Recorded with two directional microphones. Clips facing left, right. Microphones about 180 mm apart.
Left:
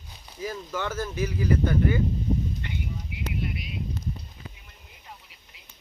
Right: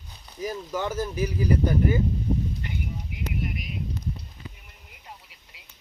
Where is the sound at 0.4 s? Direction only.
15° right (ahead or behind).